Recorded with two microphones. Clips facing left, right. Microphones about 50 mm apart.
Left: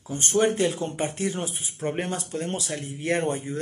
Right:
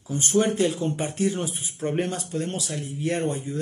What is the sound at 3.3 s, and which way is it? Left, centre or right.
Speech, left.